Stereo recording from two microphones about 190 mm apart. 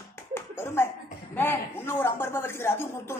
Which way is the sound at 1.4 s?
10° left (ahead or behind).